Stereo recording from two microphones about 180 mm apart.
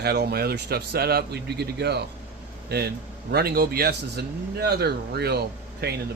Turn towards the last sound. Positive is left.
turn(degrees=-60)  # may be behind; listen again after turning